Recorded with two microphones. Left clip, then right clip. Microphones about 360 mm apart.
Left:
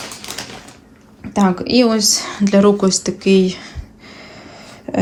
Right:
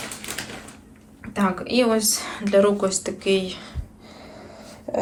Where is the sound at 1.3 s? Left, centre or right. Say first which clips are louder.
Left 7 dB; centre.